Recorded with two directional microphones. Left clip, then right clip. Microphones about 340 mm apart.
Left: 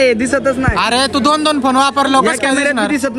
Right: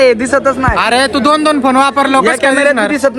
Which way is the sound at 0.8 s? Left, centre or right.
Centre.